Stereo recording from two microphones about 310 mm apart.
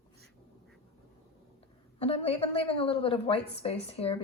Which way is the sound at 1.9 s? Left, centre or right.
Centre.